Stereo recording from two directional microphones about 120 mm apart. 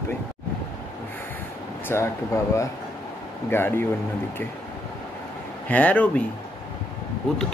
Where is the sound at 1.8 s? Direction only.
20° left (ahead or behind).